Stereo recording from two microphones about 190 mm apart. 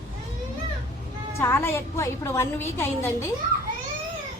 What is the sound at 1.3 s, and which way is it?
A woman's voice, 15° left (ahead or behind).